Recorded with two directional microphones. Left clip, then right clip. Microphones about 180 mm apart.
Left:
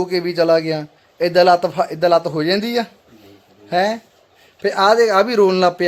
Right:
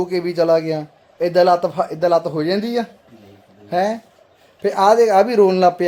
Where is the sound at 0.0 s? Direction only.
5° left (ahead or behind).